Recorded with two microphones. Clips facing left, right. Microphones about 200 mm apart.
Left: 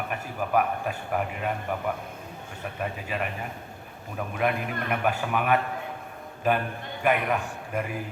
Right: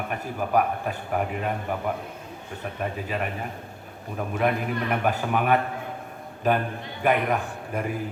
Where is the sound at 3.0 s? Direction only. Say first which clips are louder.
Right 1 dB; 40° right (ahead or behind).